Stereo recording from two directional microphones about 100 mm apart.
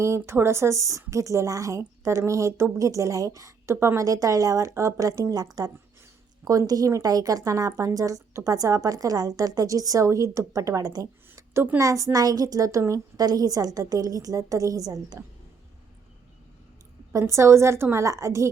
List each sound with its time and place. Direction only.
0.0 s speech: 25° right (ahead or behind)
11.3 s a sound: 25° right (ahead or behind)
11.8 s speech: 35° right (ahead or behind)
17.1 s a woman's voice: 30° right (ahead or behind)